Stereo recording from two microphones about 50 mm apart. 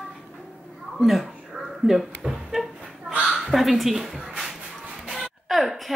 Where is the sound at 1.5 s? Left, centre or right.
Centre.